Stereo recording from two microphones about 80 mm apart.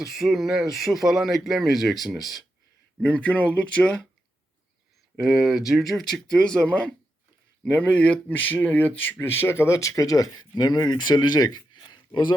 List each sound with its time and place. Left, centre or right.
0.0 s speech: centre
3.0 s speech: centre
5.2 s speech: centre; by 12.3 s left